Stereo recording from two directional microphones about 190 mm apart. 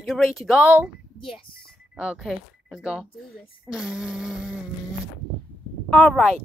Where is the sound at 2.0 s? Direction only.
5° right (ahead or behind).